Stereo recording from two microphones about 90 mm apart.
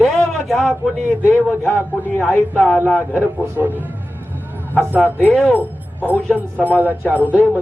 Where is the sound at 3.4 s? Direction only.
20° right (ahead or behind).